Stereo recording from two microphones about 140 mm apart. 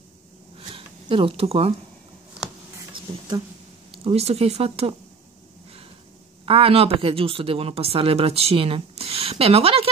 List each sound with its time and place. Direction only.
0.7 s speech: 40° right (ahead or behind)
3.1 s a sound: 45° right (ahead or behind)
3.9 s speech: 45° right (ahead or behind)
6.4 s speech: 40° right (ahead or behind)